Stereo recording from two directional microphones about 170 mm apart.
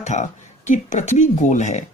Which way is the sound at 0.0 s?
45° left (ahead or behind).